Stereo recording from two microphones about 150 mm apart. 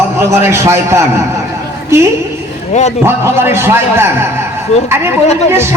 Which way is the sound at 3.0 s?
15° right (ahead or behind).